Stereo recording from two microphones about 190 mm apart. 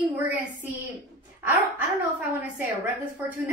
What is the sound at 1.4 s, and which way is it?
Speech, 10° right (ahead or behind).